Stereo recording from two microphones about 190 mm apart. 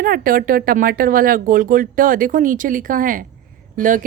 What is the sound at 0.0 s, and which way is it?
A woman's voice, 50° right (ahead or behind).